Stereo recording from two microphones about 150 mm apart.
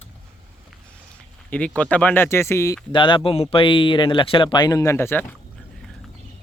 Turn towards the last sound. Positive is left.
turn(degrees=15)  # may be behind; listen again after turning